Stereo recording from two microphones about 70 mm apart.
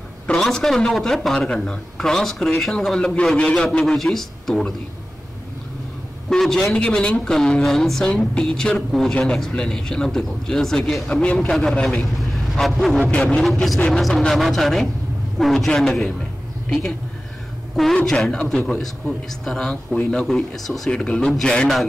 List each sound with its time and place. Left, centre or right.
0.4 s a man's voice: centre
6.2 s a man's voice: centre
13.4 s a woman's voice: centre